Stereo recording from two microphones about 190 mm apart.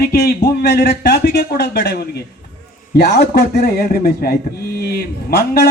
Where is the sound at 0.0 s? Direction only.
55° left (ahead or behind).